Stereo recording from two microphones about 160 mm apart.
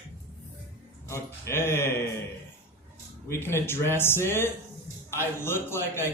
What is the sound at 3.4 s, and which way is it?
A man's voice, 15° left (ahead or behind).